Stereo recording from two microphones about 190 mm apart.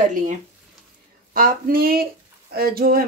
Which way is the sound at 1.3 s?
50° right (ahead or behind).